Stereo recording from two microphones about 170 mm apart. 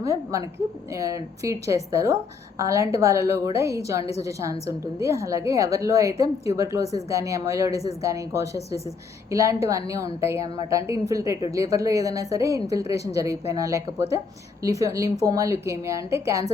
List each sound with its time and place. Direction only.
0.0 s a woman's voice: 20° right (ahead or behind)